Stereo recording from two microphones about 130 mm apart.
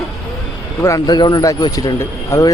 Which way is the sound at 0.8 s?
30° left (ahead or behind).